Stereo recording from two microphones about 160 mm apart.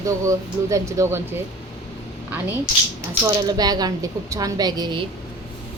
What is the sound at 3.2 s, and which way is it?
A woman's voice, 25° right (ahead or behind).